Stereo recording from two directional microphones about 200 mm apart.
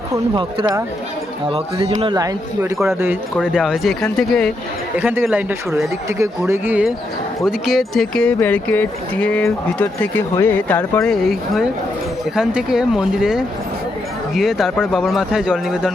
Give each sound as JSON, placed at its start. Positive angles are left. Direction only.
{"t": 0.1, "sound": "speech", "side_deg": -20}
{"t": 3.4, "sound": "speech", "side_deg": -5}